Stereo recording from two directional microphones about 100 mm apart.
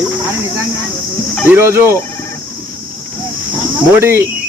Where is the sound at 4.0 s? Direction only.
25° right (ahead or behind).